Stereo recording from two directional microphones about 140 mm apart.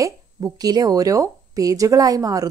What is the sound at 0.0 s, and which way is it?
Speech, 25° right (ahead or behind).